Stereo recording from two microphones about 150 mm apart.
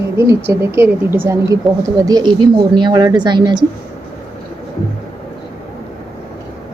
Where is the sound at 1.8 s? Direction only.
25° right (ahead or behind).